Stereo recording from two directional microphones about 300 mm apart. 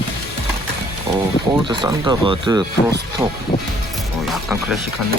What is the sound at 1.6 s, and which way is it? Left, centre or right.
Speech, centre.